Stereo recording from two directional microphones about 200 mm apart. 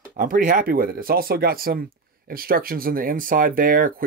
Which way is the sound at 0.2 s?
45° right (ahead or behind).